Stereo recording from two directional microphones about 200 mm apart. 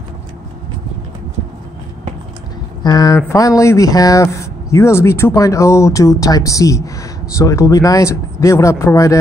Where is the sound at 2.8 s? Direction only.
20° left (ahead or behind).